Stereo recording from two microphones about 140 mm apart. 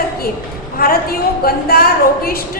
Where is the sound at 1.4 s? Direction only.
90° left.